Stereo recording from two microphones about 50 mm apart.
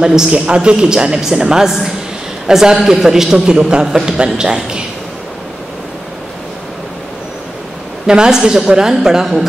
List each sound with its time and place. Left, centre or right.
0.0 s a man's voice: centre
8.1 s a man's voice: centre